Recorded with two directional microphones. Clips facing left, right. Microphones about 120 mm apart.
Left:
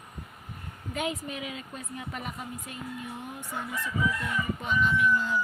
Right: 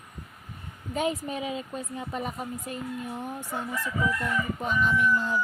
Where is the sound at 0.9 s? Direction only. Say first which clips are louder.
Right 4 dB; 35° right (ahead or behind).